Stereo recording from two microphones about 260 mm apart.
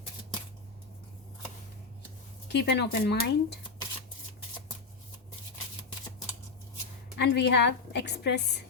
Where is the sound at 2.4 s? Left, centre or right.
Left.